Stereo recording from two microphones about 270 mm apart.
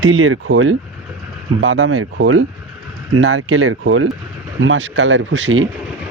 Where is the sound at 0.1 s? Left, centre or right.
Right.